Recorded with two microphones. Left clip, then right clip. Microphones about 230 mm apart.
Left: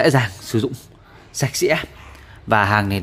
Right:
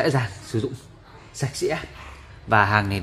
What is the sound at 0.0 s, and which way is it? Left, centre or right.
A man's voice, left.